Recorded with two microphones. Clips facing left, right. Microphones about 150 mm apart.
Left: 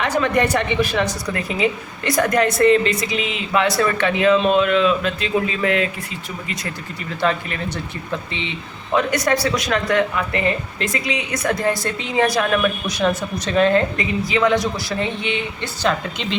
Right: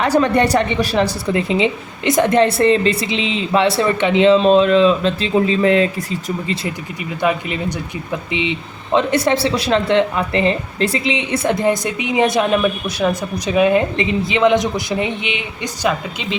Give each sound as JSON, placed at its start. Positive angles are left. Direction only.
{"t": 0.0, "sound": "a woman's voice", "side_deg": -35}
{"t": 6.7, "sound": "speech", "side_deg": -15}
{"t": 13.9, "sound": "a man's voice", "side_deg": -25}